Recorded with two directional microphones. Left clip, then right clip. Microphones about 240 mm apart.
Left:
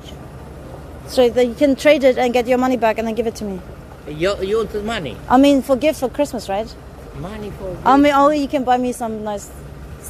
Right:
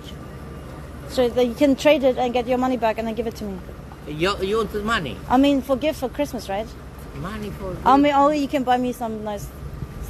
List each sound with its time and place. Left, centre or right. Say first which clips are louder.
1.1 s a woman's voice: left 5 dB; centre
1.6 s a woman's voice: left 4 dB; centre
4.1 s speech: left 3 dB; centre
5.3 s a woman's voice: left 5 dB; left
7.8 s a woman's voice: left 3 dB; left